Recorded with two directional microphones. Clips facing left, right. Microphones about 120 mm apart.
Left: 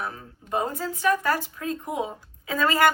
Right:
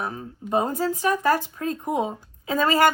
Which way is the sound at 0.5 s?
35° right (ahead or behind).